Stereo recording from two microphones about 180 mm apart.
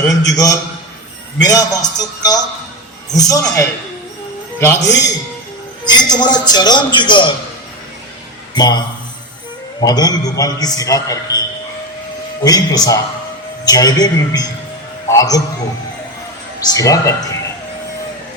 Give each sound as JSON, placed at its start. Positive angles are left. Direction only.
{"t": 0.2, "sound": "a man's voice", "side_deg": 20}
{"t": 8.5, "sound": "a man's voice", "side_deg": 25}
{"t": 9.8, "sound": "a man's voice", "side_deg": 20}
{"t": 16.6, "sound": "a man's voice", "side_deg": 20}